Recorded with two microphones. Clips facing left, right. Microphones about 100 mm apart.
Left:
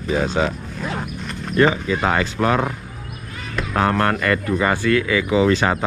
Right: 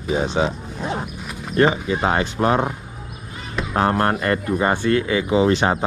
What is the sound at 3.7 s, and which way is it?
Speech, 30° right (ahead or behind).